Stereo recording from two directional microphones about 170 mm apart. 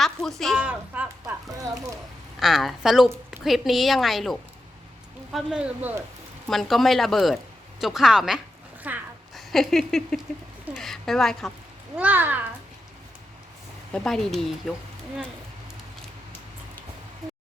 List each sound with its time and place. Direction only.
0.0 s a woman's voice: centre (ahead or behind)
1.7 s speech: 20° right (ahead or behind)
2.4 s a woman's voice: centre (ahead or behind)
11.9 s speech: 10° right (ahead or behind)
13.9 s a woman's voice: centre (ahead or behind)